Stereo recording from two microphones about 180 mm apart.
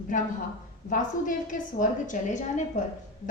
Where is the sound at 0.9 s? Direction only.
50° left (ahead or behind).